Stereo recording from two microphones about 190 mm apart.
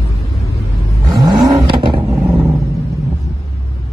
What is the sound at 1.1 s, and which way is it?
Vehicle, 20° right (ahead or behind).